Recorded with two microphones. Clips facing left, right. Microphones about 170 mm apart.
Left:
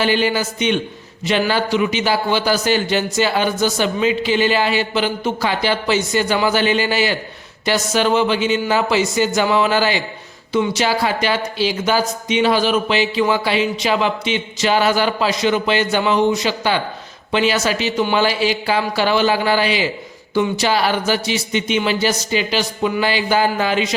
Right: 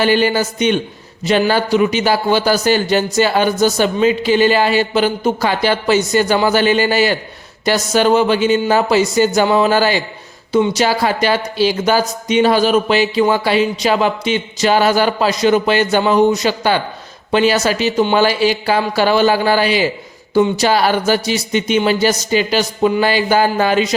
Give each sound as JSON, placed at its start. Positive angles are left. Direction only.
{"t": 0.0, "sound": "a man's voice", "side_deg": -45}